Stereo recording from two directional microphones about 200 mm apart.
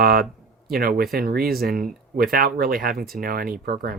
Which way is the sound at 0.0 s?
50° right (ahead or behind).